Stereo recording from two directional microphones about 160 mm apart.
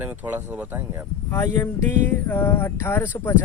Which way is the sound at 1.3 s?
15° left (ahead or behind).